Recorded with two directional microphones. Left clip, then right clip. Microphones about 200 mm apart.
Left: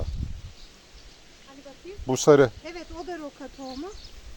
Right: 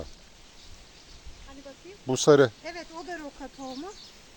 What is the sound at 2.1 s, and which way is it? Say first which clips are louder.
Speech: left 2 dB; 15° left (ahead or behind).